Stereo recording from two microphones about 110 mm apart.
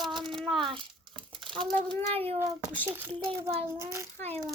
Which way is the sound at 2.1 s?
65° right (ahead or behind).